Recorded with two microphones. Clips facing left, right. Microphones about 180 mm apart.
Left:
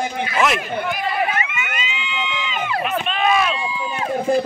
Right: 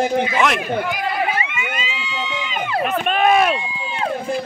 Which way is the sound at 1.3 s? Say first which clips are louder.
Right 1 dB; 30° right (ahead or behind).